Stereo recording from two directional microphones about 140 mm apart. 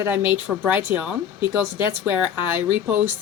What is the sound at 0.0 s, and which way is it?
Speech, 15° right (ahead or behind).